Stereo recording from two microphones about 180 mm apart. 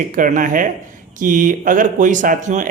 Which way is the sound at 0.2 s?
45° right (ahead or behind).